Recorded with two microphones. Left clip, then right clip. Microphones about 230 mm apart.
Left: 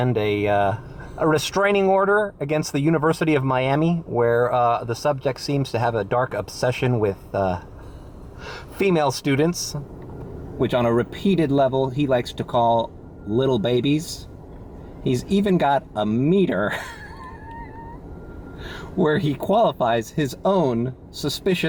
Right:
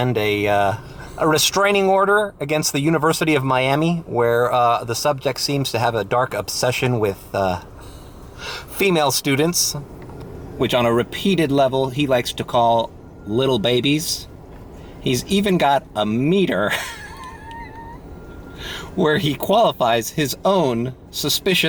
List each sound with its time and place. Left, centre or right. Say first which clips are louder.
0.0 s speech: right 2 dB; centre
18.6 s a sound: right 6 dB; centre
19.0 s speech: right 3 dB; centre